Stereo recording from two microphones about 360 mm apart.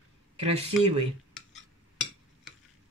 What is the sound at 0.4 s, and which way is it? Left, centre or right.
Speech, centre.